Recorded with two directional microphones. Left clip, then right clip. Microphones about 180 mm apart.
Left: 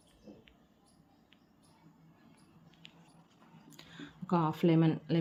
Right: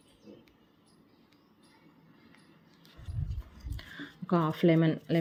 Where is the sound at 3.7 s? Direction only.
10° right (ahead or behind).